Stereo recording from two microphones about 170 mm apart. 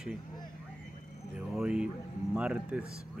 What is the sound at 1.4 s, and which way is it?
Speech, 5° right (ahead or behind).